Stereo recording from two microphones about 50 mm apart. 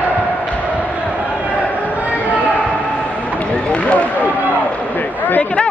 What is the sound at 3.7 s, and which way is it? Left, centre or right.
Run, left.